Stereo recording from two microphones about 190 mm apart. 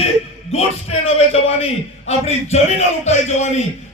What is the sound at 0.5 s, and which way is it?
A man's voice, 35° left (ahead or behind).